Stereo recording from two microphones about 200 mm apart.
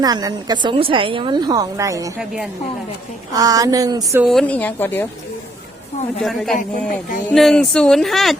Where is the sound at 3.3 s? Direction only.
20° right (ahead or behind).